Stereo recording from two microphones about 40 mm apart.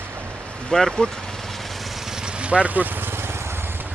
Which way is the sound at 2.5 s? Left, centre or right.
Right.